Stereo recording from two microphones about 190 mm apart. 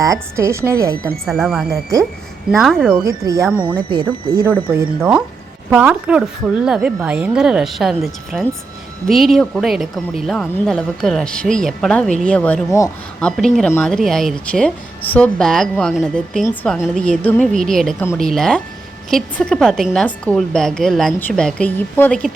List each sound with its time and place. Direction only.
0.0 s a woman's voice: 15° right (ahead or behind)
1.2 s a woman's voice: centre (ahead or behind)
2.9 s a woman's voice: 15° right (ahead or behind)
4.7 s a woman's voice: 10° right (ahead or behind); by 12.9 s 15° left (ahead or behind)
13.1 s a woman's voice: 5° left (ahead or behind)